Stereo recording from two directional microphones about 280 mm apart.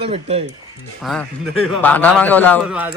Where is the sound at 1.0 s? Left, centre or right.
Centre.